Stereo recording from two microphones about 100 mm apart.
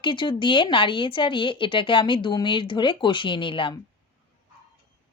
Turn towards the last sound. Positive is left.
turn(degrees=55)  # may be behind; listen again after turning